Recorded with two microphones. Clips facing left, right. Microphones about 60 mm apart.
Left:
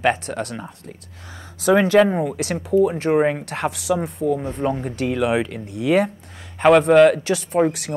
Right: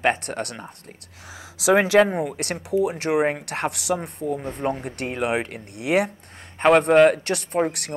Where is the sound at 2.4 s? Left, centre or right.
Right.